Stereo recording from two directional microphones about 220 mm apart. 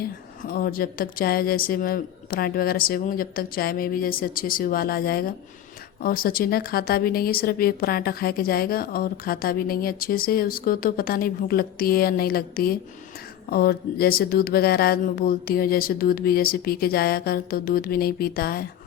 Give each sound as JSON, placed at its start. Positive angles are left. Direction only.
{"t": 0.4, "sound": "a woman's voice", "side_deg": 40}